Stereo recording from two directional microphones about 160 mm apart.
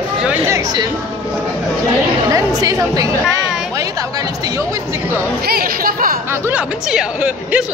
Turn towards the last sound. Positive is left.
turn(degrees=-5)  # may be behind; listen again after turning